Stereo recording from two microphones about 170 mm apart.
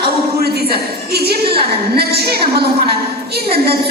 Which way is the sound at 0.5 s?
70° right (ahead or behind).